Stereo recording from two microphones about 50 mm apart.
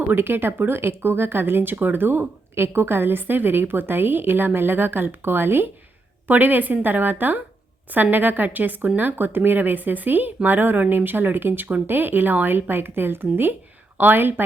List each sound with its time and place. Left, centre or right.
0.1 s a woman's voice: right
6.2 s a woman's voice: right